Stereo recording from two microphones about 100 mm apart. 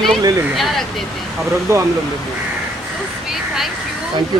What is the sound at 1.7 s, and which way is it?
Speech, 30° right (ahead or behind).